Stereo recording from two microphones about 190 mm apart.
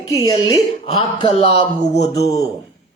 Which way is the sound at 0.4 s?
25° left (ahead or behind).